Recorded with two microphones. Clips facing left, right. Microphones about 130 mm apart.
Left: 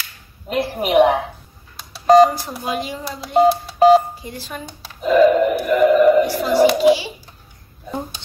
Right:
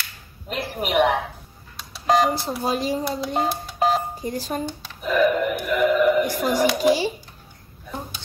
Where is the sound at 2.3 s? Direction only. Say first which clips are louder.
Right 1 dB; 35° right (ahead or behind).